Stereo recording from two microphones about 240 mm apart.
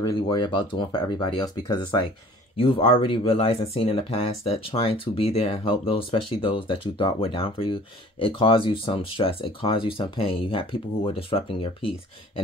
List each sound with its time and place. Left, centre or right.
0.0 s speech: centre